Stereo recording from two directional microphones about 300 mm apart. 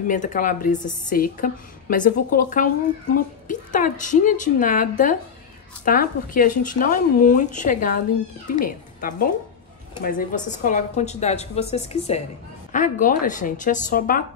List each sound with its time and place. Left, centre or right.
0.1 s a woman's voice: left